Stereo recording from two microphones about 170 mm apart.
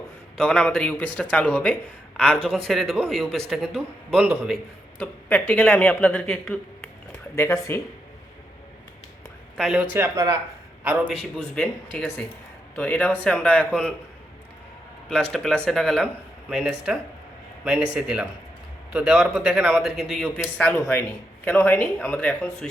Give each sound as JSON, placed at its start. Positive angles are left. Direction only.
{"t": 0.3, "sound": "a man's voice", "side_deg": 5}
{"t": 7.3, "sound": "speech", "side_deg": 15}
{"t": 9.6, "sound": "a man's voice", "side_deg": 0}
{"t": 9.9, "sound": "speech", "side_deg": -15}
{"t": 11.1, "sound": "a man's voice", "side_deg": 5}
{"t": 15.1, "sound": "a man's voice", "side_deg": 5}
{"t": 20.4, "sound": "speech", "side_deg": 10}